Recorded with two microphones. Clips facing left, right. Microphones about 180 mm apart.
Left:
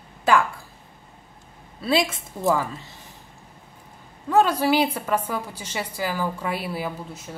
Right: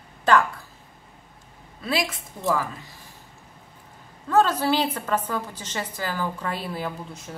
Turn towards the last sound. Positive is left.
turn(degrees=5)  # may be behind; listen again after turning